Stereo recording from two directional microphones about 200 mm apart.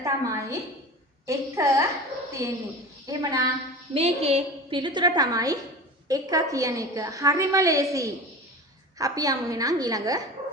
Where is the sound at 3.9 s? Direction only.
30° right (ahead or behind).